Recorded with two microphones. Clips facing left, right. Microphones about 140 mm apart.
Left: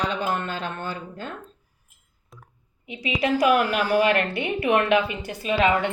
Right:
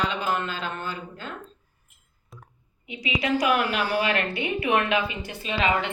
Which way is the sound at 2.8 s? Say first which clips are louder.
Left 3 dB; 45° left (ahead or behind).